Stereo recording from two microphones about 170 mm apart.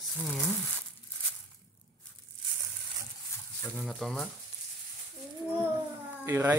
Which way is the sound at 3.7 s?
Centre (ahead or behind).